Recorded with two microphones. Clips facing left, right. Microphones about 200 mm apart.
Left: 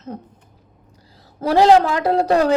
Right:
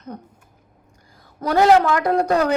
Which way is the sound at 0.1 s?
30° left (ahead or behind).